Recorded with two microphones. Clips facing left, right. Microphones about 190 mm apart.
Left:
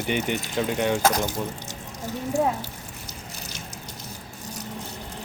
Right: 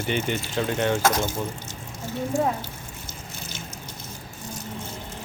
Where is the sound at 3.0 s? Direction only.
35° left (ahead or behind).